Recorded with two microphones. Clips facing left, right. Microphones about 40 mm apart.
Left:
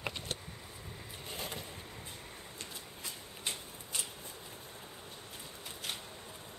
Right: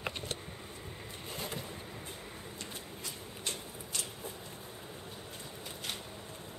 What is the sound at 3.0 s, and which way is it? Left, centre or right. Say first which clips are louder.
Shuffling cards: right 1 dB; centre.